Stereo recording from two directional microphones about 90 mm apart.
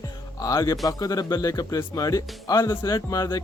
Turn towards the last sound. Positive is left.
turn(degrees=45)  # may be behind; listen again after turning